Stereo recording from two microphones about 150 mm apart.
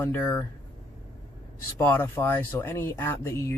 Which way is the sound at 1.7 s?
15° left (ahead or behind).